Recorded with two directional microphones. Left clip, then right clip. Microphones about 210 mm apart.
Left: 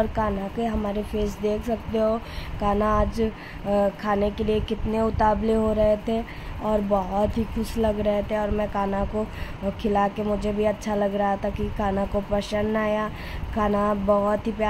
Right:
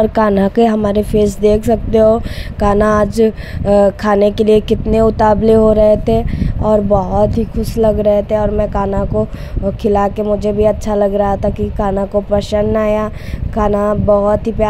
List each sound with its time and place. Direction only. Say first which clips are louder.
0.1 s music: right 14 dB; 40° right (ahead or behind); by 9.0 s 25° right (ahead or behind)
9.8 s speech: right 10 dB; 30° right (ahead or behind)